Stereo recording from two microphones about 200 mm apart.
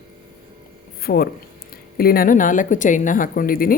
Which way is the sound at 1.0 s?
50° left (ahead or behind).